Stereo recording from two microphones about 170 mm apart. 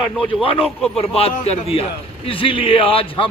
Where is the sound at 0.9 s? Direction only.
35° left (ahead or behind).